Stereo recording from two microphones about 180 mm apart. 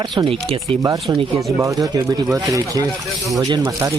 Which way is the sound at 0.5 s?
20° right (ahead or behind).